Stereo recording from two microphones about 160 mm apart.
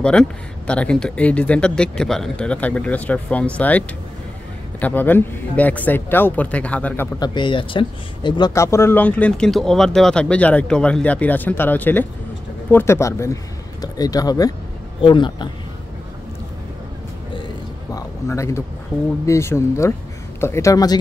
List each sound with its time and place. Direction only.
0.0 s speech: 5° left (ahead or behind)
7.2 s speech: 30° left (ahead or behind)
17.9 s a sound: 20° left (ahead or behind)
19.2 s speech: 15° left (ahead or behind)